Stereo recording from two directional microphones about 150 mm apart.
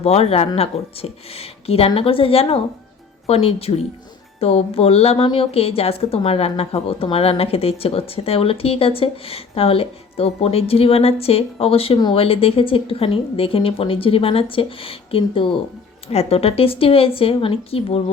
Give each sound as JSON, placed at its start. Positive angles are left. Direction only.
{"t": 0.0, "sound": "a woman's voice", "side_deg": 40}